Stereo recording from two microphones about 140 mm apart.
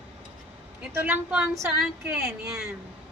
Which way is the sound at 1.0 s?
10° right (ahead or behind).